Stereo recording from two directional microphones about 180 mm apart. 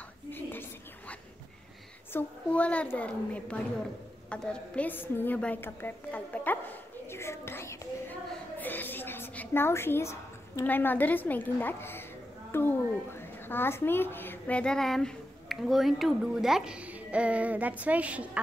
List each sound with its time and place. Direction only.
0.3 s whispering: 10° left (ahead or behind)
2.1 s a woman's voice: 5° left (ahead or behind)
7.1 s a sound: 15° left (ahead or behind)
13.5 s speech: 10° left (ahead or behind); by 18.4 s 5° right (ahead or behind)